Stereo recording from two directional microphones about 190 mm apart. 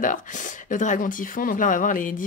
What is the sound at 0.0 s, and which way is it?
Speech, 45° left (ahead or behind).